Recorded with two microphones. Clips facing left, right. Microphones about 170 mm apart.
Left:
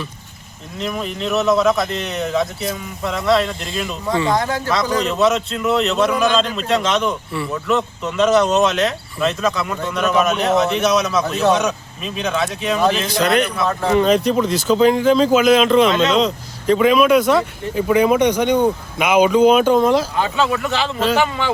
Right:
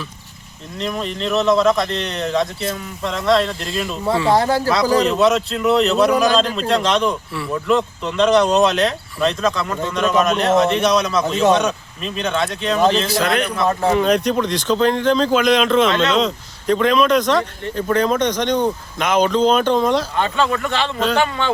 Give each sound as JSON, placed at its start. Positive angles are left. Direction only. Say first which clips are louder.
{"t": 0.8, "sound": "speech", "louder": "even", "side_deg": 5}
{"t": 4.3, "sound": "speech", "louder": "right 4 dB", "side_deg": -30}
{"t": 5.0, "sound": "speech", "louder": "right 1 dB", "side_deg": 0}